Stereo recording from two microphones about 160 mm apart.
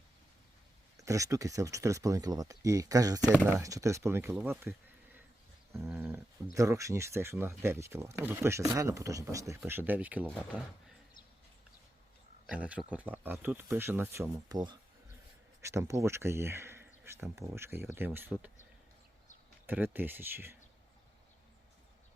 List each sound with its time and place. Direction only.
0.9 s speech: 20° right (ahead or behind)
5.7 s speech: 15° right (ahead or behind)
12.5 s speech: 10° right (ahead or behind)
15.6 s speech: 15° right (ahead or behind)
19.6 s speech: 10° right (ahead or behind)